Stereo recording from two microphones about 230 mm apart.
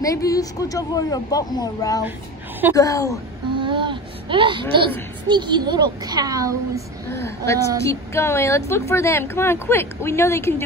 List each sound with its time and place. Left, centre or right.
0.0 s a woman's voice: centre
3.5 s a child's voice: right
7.1 s a woman's voice: centre